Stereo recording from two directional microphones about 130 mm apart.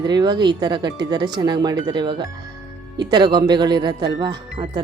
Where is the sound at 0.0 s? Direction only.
35° right (ahead or behind).